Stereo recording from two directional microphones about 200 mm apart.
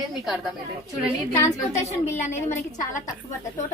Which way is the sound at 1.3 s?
10° left (ahead or behind).